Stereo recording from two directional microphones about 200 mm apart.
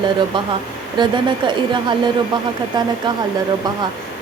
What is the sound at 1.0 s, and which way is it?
Speech, 25° right (ahead or behind).